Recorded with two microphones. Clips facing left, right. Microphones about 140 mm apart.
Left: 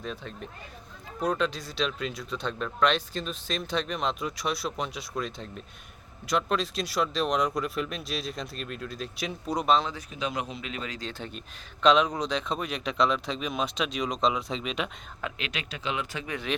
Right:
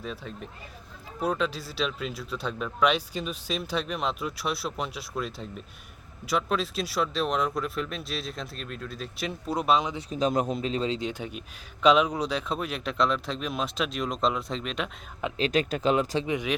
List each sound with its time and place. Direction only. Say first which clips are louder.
0.0 s speech: even; centre (ahead or behind)
10.1 s speech: right 7 dB; 40° right (ahead or behind)
10.7 s speech: right 8 dB; 30° right (ahead or behind); by 14.8 s centre (ahead or behind)
15.4 s speech: right 11 dB; 40° right (ahead or behind)
16.2 s speech: right 6 dB; 20° right (ahead or behind)